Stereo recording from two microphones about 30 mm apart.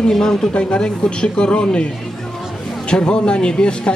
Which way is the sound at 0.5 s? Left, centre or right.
Left.